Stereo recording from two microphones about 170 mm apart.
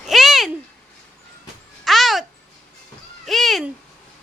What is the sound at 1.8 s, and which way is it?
Babbling, centre (ahead or behind).